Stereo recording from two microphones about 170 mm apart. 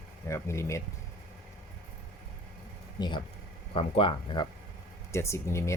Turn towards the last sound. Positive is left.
turn(degrees=15)  # may be behind; listen again after turning